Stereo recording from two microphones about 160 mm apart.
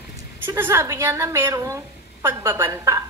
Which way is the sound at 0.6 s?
15° right (ahead or behind).